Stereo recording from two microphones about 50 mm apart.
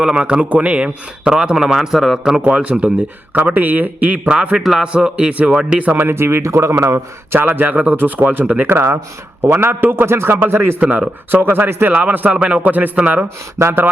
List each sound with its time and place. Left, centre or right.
0.0 s a man's voice: right; by 2.1 s centre
2.4 s a man's voice: right
3.3 s a man's voice: right; by 5.3 s centre
5.6 s a man's voice: right
6.0 s a man's voice: right
7.3 s a man's voice: right
10.8 s a man's voice: right
11.9 s a man's voice: right
12.3 s a man's voice: right
13.6 s a man's voice: right